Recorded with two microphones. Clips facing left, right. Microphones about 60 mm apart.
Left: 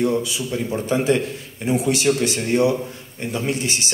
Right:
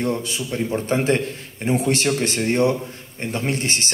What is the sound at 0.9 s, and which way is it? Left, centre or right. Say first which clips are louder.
A man's voice: left 2 dB; right.